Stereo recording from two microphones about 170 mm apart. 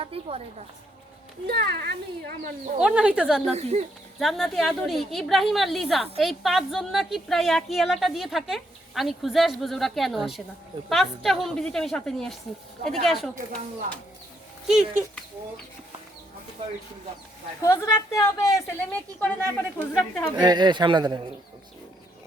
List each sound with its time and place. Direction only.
0.1 s speech: 35° right (ahead or behind)
1.5 s a child's voice: 65° right (ahead or behind)
2.8 s a woman's voice: 5° right (ahead or behind)
3.5 s speech: 40° right (ahead or behind)
4.2 s a woman's voice: centre (ahead or behind)
14.7 s a woman's voice: 5° right (ahead or behind)
17.6 s a woman's voice: 15° left (ahead or behind)
19.9 s a woman's voice: centre (ahead or behind)
20.3 s a man's voice: 25° right (ahead or behind)